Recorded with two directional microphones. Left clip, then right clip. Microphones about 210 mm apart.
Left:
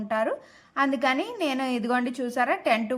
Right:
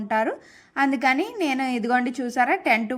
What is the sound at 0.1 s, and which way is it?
A woman's voice, 10° right (ahead or behind).